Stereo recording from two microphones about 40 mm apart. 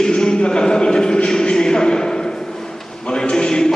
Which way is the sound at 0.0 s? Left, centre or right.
Centre.